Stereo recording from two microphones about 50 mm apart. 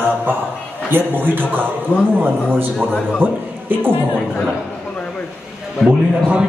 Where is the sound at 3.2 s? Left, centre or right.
Right.